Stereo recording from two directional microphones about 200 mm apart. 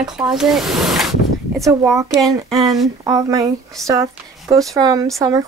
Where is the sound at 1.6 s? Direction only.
15° right (ahead or behind).